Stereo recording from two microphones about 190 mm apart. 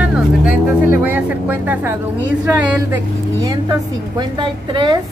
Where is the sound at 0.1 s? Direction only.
5° right (ahead or behind).